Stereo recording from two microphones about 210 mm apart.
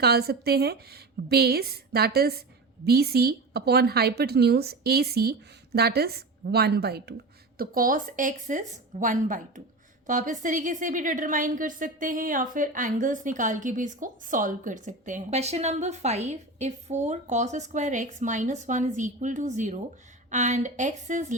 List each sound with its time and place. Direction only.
0.0 s a woman's voice: 50° right (ahead or behind)